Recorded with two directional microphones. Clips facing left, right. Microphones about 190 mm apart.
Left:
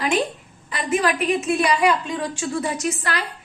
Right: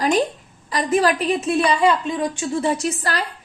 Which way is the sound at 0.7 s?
35° right (ahead or behind).